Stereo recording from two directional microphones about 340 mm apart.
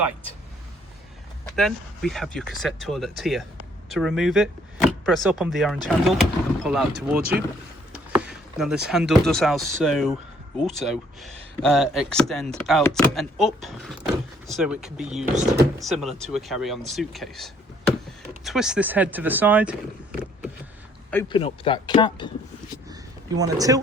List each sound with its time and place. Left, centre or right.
1.5 s speech: centre
15.2 s speech: right
15.8 s speech: centre
21.1 s speech: centre
22.9 s a sound: centre